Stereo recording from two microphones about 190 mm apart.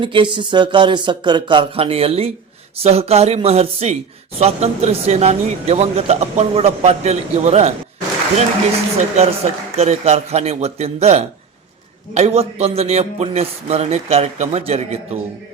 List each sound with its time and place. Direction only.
0.0 s speech: 25° right (ahead or behind)
9.1 s speech: 35° right (ahead or behind)